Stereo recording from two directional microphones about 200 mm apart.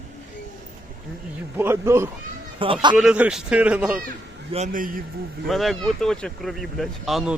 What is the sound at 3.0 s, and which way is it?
Speech, 5° right (ahead or behind).